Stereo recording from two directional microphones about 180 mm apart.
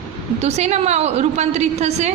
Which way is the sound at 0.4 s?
35° right (ahead or behind).